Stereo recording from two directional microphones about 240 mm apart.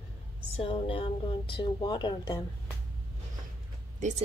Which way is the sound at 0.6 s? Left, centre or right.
Left.